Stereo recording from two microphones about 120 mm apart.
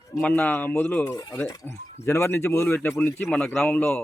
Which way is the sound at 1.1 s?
30° left (ahead or behind).